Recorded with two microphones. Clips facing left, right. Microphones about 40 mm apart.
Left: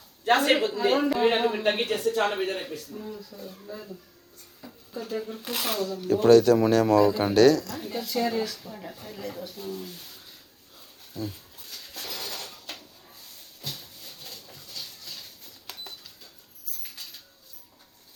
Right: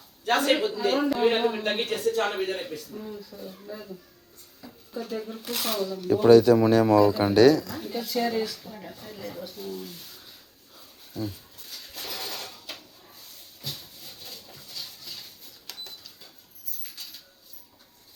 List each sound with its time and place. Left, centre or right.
0.7 s speech: centre
0.9 s speech: centre
5.4 s speech: centre
6.1 s speech: centre
7.8 s speech: centre
11.1 s a sound: centre